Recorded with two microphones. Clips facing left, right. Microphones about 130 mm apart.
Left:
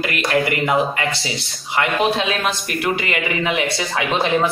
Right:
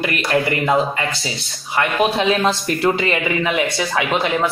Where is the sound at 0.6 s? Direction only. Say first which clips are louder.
Right 1 dB; 20° left (ahead or behind).